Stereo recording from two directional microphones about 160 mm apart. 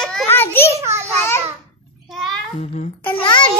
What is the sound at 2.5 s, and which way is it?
Speech, 45° left (ahead or behind).